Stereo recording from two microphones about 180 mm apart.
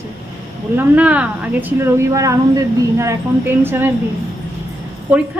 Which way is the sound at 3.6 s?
10° right (ahead or behind).